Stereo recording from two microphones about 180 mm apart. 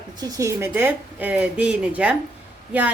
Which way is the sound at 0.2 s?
20° right (ahead or behind).